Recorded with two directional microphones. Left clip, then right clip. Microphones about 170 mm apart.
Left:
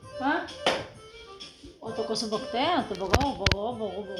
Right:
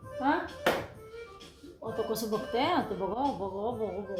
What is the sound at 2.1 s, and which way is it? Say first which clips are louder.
Speech: left 2 dB; 25° left (ahead or behind).